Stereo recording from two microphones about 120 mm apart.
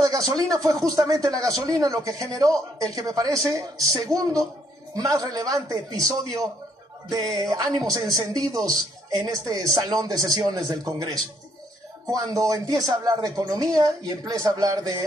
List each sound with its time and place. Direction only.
0.0 s speech: 30° right (ahead or behind)
7.1 s speech: 35° right (ahead or behind)
12.1 s speech: 30° right (ahead or behind)